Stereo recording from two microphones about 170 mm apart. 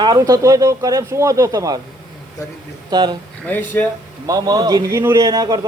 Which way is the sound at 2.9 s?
25° right (ahead or behind).